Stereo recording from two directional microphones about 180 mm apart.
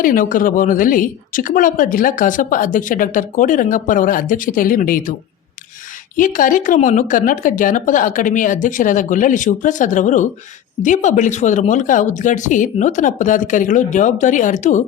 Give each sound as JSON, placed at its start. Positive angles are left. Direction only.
{"t": 0.0, "sound": "a woman's voice", "side_deg": 50}
{"t": 6.1, "sound": "a woman's voice", "side_deg": 45}